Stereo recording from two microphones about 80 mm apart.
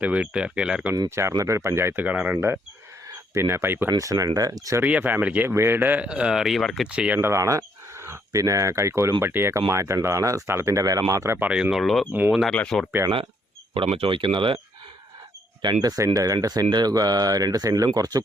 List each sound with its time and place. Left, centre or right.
0.0 s speech: centre
1.4 s speech: right
2.0 s speech: centre
3.3 s speech: right
3.9 s speech: right
4.8 s speech: centre
6.1 s speech: centre
6.8 s speech: centre
7.2 s speech: right
11.3 s speech: centre
11.8 s speech: centre
13.7 s speech: right
15.6 s speech: right
16.6 s speech: right